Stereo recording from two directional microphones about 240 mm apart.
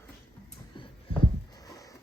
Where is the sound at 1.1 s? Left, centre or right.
Left.